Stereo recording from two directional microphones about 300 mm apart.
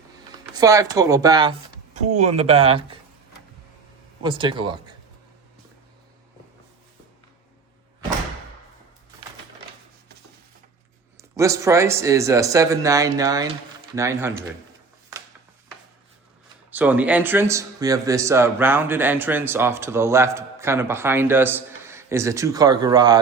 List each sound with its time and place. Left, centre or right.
0.5 s speech: centre
4.2 s speech: centre
11.2 s speech: centre
16.7 s speech: centre